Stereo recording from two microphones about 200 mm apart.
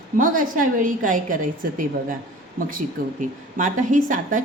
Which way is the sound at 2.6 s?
45° right (ahead or behind).